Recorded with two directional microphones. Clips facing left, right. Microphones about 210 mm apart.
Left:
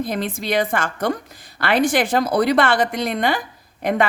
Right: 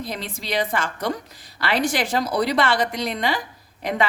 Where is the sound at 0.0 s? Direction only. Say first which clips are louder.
Left 7 dB; 55° left (ahead or behind).